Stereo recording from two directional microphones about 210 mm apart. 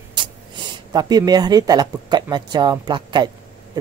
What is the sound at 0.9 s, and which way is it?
Speech, 20° right (ahead or behind).